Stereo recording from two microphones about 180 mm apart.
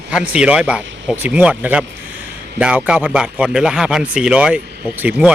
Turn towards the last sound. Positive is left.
turn(degrees=-10)  # may be behind; listen again after turning